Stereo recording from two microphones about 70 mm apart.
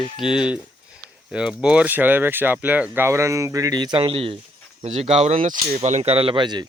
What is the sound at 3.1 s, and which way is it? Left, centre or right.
Speech, right.